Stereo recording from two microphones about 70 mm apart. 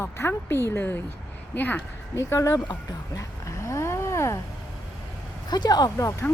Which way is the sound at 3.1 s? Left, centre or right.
Left.